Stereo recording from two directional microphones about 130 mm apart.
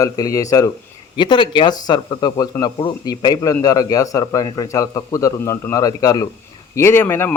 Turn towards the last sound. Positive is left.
turn(degrees=15)  # may be behind; listen again after turning